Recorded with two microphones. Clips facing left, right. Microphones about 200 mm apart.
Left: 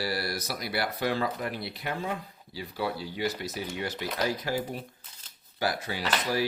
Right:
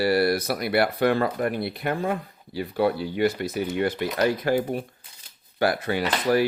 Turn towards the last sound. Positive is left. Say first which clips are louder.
# right 7 dB
turn(degrees=-60)  # may be behind; listen again after turning